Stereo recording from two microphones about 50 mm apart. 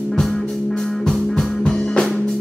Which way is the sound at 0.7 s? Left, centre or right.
Centre.